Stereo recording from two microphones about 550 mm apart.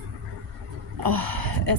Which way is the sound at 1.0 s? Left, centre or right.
Right.